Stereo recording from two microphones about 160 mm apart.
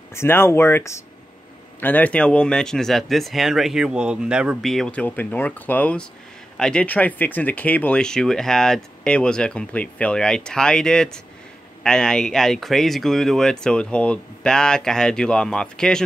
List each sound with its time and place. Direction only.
0.1 s speech: 15° left (ahead or behind)